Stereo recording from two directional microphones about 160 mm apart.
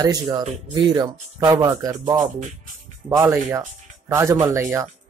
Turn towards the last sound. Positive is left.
turn(degrees=-15)  # may be behind; listen again after turning